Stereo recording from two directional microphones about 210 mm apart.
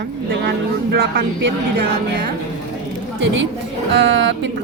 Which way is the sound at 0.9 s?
55° right (ahead or behind).